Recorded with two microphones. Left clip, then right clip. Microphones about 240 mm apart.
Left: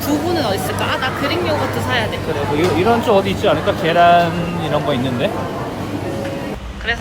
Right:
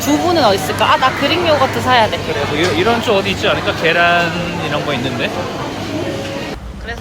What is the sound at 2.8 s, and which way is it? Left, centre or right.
Speech, centre.